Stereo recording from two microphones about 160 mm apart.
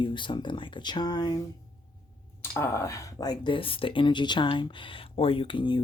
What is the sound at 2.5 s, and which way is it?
Speech, 15° left (ahead or behind).